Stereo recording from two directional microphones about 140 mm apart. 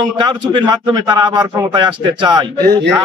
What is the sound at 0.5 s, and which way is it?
A man's voice, 30° right (ahead or behind).